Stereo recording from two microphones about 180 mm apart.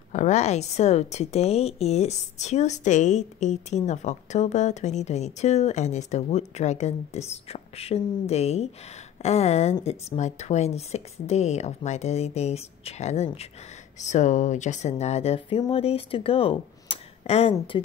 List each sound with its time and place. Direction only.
0.1 s a woman's voice: 40° left (ahead or behind)